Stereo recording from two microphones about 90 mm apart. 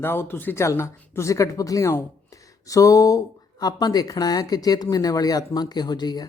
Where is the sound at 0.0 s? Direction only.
25° left (ahead or behind).